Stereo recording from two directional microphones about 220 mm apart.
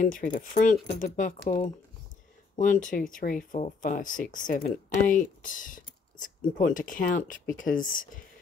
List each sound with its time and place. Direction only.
0.0 s speech: 35° left (ahead or behind)